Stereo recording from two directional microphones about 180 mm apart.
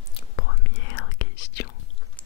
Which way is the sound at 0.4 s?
90° left.